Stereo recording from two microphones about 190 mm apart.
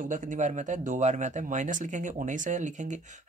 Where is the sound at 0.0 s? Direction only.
40° right (ahead or behind).